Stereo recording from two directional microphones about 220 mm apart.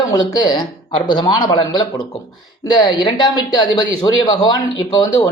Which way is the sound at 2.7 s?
20° left (ahead or behind).